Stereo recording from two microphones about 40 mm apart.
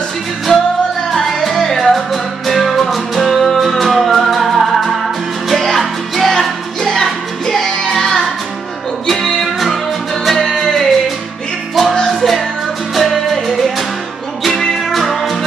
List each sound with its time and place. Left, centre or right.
0.5 s music: centre
12.1 s music: centre